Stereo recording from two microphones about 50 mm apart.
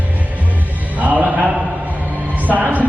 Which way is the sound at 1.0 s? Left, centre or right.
Right.